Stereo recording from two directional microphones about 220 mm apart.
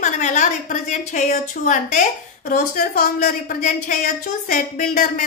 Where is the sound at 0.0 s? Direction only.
35° left (ahead or behind).